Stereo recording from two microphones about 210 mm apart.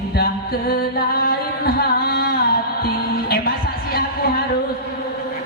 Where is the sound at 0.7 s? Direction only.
45° left (ahead or behind).